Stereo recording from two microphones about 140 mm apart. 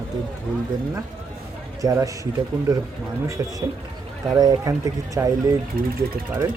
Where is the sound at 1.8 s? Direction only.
25° right (ahead or behind).